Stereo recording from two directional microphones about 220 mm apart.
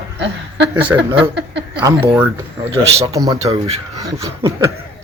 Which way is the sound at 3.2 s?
15° right (ahead or behind).